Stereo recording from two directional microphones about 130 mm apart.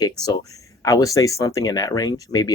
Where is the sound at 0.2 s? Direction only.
30° left (ahead or behind).